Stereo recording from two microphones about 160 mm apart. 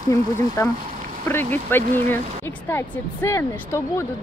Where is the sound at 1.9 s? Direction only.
15° left (ahead or behind).